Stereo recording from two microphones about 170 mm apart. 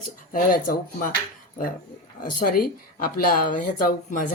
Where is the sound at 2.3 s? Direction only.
55° left (ahead or behind).